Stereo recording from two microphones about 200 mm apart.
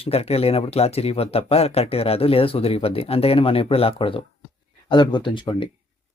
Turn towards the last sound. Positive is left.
turn(degrees=25)  # may be behind; listen again after turning